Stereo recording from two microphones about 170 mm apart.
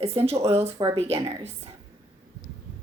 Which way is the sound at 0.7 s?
25° right (ahead or behind).